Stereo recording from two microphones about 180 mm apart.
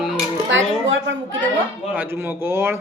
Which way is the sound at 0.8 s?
90° right.